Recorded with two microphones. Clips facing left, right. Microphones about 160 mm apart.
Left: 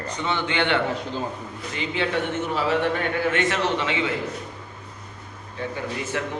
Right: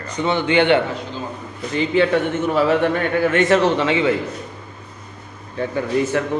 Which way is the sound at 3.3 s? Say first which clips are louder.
Right 8 dB; 40° right (ahead or behind).